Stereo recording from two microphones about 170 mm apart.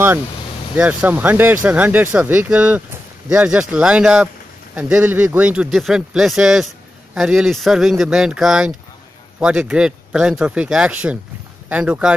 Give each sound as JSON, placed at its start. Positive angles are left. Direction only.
{"t": 0.7, "sound": "speech", "side_deg": -10}